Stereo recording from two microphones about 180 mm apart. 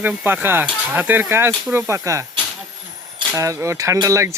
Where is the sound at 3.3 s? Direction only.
15° right (ahead or behind).